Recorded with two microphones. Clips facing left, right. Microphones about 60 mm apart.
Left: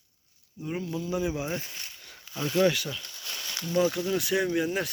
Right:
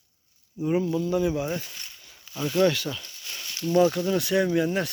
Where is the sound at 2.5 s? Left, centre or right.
Centre.